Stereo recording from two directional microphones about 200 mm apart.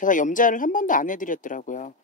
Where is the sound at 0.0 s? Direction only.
40° left (ahead or behind).